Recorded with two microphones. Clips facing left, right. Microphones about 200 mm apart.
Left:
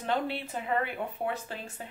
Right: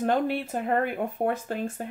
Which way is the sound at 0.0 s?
50° right (ahead or behind).